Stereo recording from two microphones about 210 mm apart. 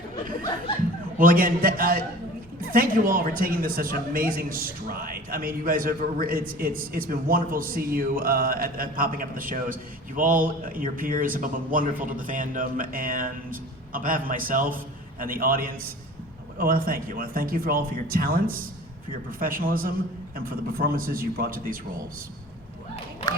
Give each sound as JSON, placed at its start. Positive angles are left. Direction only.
{"t": 1.2, "sound": "a man's voice", "side_deg": -40}